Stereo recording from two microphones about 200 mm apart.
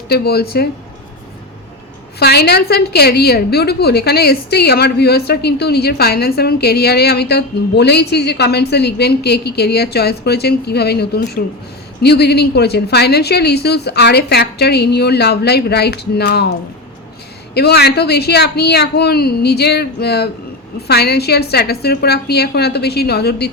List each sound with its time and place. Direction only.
0.1 s a woman's voice: 50° left (ahead or behind)
2.1 s a woman's voice: 55° left (ahead or behind)